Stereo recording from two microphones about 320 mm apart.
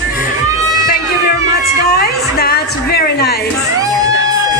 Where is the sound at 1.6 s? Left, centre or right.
Left.